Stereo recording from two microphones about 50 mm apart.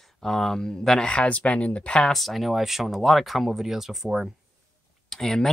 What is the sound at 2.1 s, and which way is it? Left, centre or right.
Speech, centre.